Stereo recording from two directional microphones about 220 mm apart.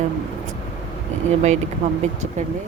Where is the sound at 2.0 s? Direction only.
30° right (ahead or behind).